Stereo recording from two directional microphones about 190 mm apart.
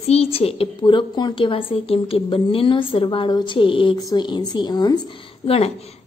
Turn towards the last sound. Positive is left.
turn(degrees=30)  # may be behind; listen again after turning